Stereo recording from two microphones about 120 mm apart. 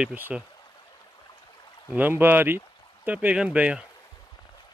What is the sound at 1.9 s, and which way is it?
Speech, 15° right (ahead or behind).